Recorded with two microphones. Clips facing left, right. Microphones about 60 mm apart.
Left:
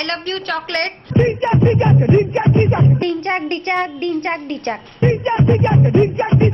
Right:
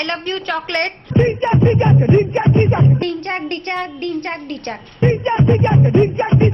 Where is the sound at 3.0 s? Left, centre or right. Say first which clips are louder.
Left 2 dB; left.